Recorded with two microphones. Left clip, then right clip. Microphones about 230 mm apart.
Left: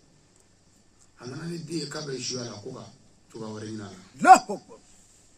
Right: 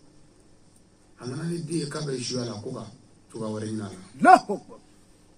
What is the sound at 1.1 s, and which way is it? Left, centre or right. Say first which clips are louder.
A man's voice: right 4 dB; centre.